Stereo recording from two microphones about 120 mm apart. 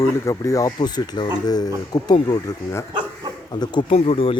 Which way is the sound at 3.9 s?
55° left (ahead or behind).